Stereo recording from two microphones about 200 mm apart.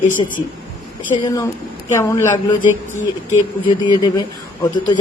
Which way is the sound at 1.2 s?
20° left (ahead or behind).